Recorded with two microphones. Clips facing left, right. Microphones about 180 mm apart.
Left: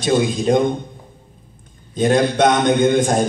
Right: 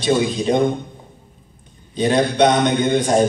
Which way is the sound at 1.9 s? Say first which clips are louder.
Left 1 dB; 45° left (ahead or behind).